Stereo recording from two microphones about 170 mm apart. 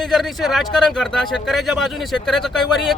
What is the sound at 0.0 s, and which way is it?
Speech, centre (ahead or behind).